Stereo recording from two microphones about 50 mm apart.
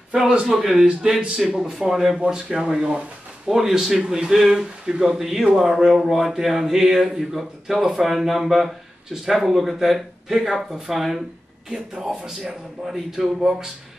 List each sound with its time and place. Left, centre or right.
0.1 s a man's voice: right
0.6 s speech: centre
3.4 s speech: centre